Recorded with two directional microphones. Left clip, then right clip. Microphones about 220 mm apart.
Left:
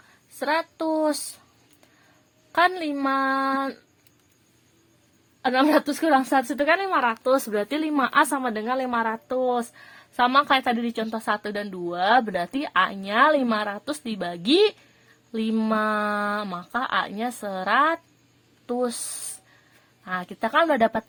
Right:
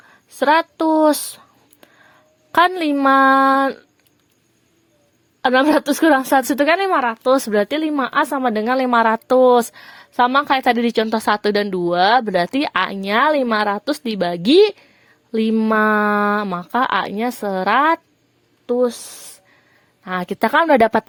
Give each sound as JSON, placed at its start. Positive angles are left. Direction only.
{"t": 0.3, "sound": "a woman's voice", "side_deg": -45}
{"t": 2.5, "sound": "a woman's voice", "side_deg": -45}
{"t": 5.4, "sound": "a woman's voice", "side_deg": -40}
{"t": 10.2, "sound": "a woman's voice", "side_deg": -30}
{"t": 15.7, "sound": "a woman's voice", "side_deg": -40}
{"t": 18.6, "sound": "speech", "side_deg": -25}
{"t": 20.1, "sound": "a woman's voice", "side_deg": -40}